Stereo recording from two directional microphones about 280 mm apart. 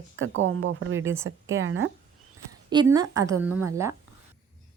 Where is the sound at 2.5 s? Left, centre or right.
Centre.